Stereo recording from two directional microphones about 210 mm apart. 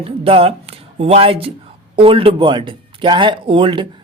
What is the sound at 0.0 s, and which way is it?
Speech, 25° right (ahead or behind).